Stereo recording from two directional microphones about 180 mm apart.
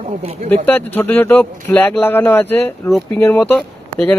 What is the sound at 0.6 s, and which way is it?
Speech, 10° left (ahead or behind).